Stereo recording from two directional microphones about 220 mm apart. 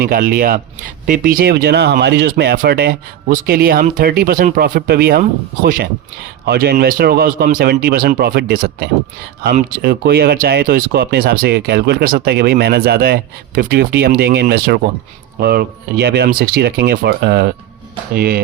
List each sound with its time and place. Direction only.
0.0 s speech: 45° right (ahead or behind)